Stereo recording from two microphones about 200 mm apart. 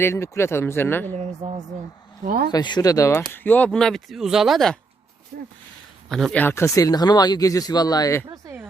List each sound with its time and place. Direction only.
0.0 s speech: 15° left (ahead or behind)
1.1 s speech: 30° right (ahead or behind)
2.2 s speech: 45° right (ahead or behind)
2.5 s speech: 20° left (ahead or behind); by 4.8 s centre (ahead or behind)
6.1 s speech: centre (ahead or behind); by 8.2 s 20° left (ahead or behind)